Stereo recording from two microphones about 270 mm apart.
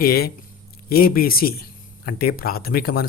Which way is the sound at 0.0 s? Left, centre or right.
Left.